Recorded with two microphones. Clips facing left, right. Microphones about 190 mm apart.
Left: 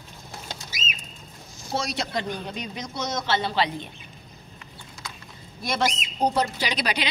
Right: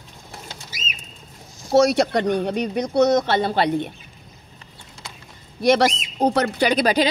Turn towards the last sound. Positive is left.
turn(degrees=-50)  # may be behind; listen again after turning